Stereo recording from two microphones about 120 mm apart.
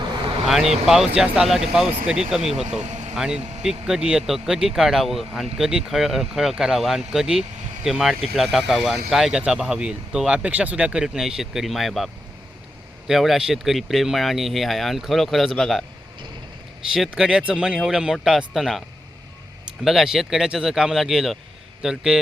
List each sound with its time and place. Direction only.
0.4 s speech: centre (ahead or behind)
2.6 s speech: 70° right (ahead or behind)
3.2 s speech: 5° right (ahead or behind)
16.9 s speech: 5° right (ahead or behind)
19.8 s a man's voice: 5° right (ahead or behind)